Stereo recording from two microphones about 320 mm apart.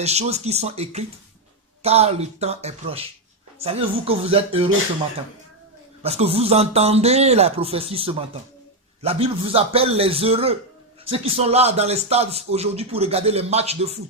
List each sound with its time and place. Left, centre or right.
0.0 s a man's voice: centre
6.0 s a man's voice: centre